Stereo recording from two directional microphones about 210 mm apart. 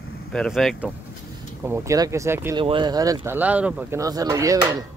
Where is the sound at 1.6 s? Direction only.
10° right (ahead or behind).